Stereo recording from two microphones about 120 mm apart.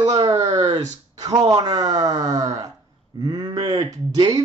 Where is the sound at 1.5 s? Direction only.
30° right (ahead or behind).